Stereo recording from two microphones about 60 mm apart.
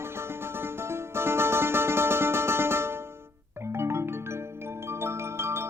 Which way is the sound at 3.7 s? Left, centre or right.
Right.